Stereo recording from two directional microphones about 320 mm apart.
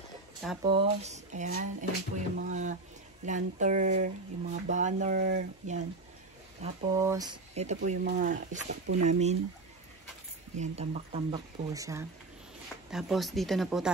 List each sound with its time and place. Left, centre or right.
0.7 s speech: centre
6.6 s speech: centre
10.5 s speech: right; by 13.8 s centre